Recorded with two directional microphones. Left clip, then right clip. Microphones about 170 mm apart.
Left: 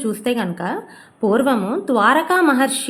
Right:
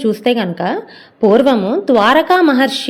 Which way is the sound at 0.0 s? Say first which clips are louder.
Right 7 dB; 25° right (ahead or behind).